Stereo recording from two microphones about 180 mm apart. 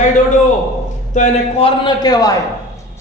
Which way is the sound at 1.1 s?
35° left (ahead or behind).